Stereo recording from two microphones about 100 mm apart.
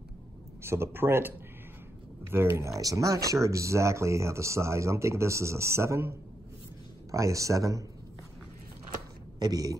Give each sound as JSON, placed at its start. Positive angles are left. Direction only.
{"t": 0.6, "sound": "speech", "side_deg": -25}
{"t": 2.3, "sound": "a man's voice", "side_deg": -25}
{"t": 9.4, "sound": "a man's voice", "side_deg": -40}